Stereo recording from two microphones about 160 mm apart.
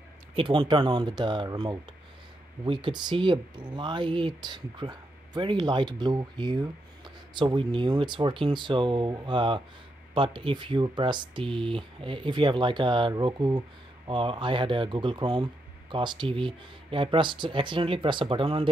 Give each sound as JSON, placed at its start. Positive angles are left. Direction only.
{"t": 0.4, "sound": "speech", "side_deg": -30}